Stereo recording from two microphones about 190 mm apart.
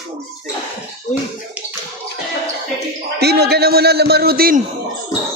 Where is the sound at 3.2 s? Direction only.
60° right (ahead or behind).